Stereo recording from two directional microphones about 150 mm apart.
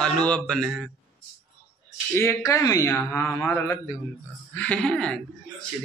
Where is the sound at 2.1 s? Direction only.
20° left (ahead or behind).